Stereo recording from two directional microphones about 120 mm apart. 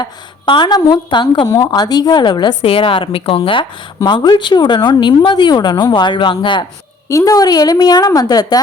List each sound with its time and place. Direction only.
0.0 s a woman's voice: 40° left (ahead or behind)
7.1 s a woman's voice: 25° left (ahead or behind)